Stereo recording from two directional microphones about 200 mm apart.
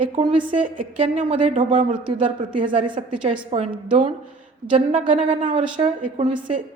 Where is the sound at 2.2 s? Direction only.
25° right (ahead or behind).